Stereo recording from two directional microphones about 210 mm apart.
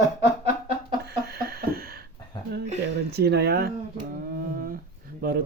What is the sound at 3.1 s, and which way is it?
Speech, 50° right (ahead or behind).